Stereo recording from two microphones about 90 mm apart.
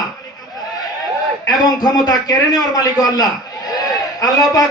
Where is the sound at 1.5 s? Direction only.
45° left (ahead or behind).